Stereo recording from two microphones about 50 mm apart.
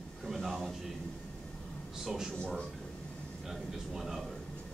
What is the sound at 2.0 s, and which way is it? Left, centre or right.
Speech, centre.